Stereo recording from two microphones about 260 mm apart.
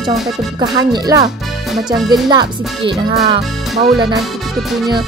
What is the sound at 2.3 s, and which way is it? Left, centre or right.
Speech, centre.